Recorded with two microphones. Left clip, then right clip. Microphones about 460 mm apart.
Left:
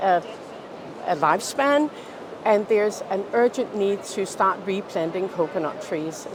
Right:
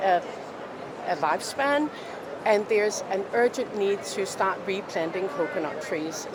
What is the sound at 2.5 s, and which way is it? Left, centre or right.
A woman's voice, left.